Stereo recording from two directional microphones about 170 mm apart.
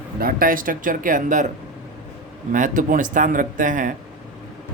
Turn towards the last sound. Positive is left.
turn(degrees=-50)  # may be behind; listen again after turning